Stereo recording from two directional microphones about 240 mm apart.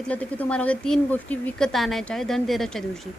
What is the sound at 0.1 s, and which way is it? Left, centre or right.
A woman's voice, centre.